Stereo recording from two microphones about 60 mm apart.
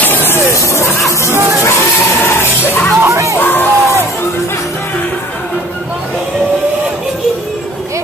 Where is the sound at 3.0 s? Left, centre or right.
Right.